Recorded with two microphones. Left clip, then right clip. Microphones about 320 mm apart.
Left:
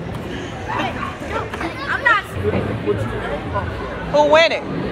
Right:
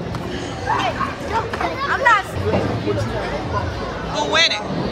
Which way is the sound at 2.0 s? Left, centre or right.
Right.